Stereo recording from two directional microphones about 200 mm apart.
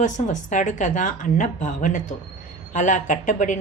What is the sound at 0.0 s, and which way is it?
A woman's voice, 40° left (ahead or behind).